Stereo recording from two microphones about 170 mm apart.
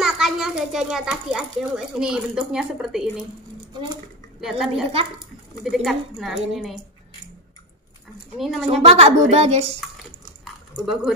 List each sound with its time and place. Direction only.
0.0 s a child's voice: centre (ahead or behind)
4.4 s a woman's voice: 5° right (ahead or behind)
8.4 s a woman's voice: centre (ahead or behind)
8.8 s a woman's voice: 35° right (ahead or behind)